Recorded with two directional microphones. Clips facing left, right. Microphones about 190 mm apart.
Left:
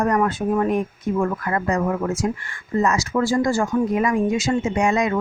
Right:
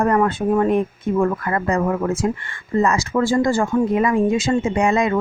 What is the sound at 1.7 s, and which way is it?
Speech, 55° right (ahead or behind).